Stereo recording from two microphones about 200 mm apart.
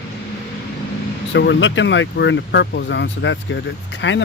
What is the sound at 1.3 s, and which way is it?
Speech, 65° left (ahead or behind).